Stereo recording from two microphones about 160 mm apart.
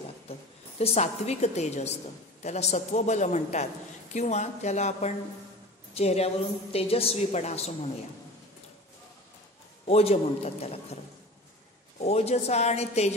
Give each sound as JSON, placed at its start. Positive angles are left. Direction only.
{"t": 0.7, "sound": "a woman's voice", "side_deg": 40}
{"t": 9.8, "sound": "a woman's voice", "side_deg": 40}
{"t": 12.0, "sound": "a woman's voice", "side_deg": 40}